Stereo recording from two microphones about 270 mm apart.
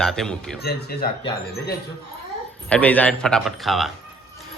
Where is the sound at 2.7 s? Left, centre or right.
Centre.